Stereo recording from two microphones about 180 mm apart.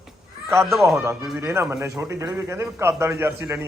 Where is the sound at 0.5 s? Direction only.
15° right (ahead or behind).